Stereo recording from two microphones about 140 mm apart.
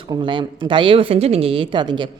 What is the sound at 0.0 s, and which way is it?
A woman's voice, 35° right (ahead or behind).